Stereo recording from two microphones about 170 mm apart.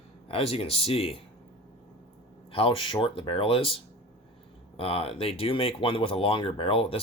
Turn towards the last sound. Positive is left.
turn(degrees=35)  # may be behind; listen again after turning